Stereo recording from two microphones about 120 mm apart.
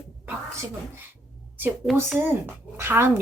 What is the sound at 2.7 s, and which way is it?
Speech, 20° right (ahead or behind).